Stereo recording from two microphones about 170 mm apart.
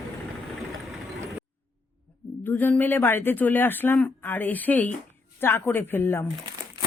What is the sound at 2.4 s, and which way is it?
Speech, 10° left (ahead or behind).